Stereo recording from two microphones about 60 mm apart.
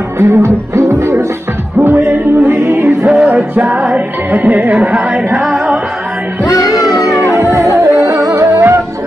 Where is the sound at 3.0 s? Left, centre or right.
Centre.